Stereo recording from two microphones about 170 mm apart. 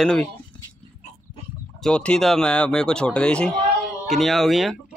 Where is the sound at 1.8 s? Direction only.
5° left (ahead or behind).